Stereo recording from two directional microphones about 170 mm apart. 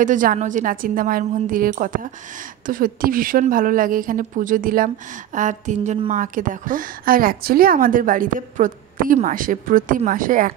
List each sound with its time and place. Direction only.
0.0 s a woman's voice: 50° right (ahead or behind)